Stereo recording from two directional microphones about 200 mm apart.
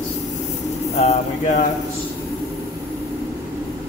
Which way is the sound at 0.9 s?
35° left (ahead or behind).